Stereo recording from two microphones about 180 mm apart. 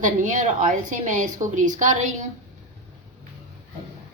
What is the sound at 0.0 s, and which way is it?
A woman's voice, 45° right (ahead or behind).